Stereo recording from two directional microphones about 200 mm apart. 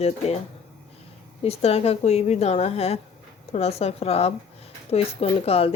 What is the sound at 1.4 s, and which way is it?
A woman's voice, 30° left (ahead or behind).